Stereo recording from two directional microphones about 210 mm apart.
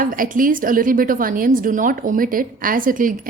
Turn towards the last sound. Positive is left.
turn(degrees=-40)  # may be behind; listen again after turning